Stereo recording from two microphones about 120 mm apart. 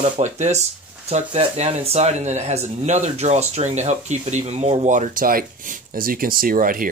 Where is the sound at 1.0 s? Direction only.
65° right (ahead or behind).